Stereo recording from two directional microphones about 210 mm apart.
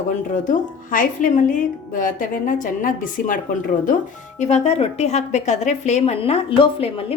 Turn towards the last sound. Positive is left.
turn(degrees=25)  # may be behind; listen again after turning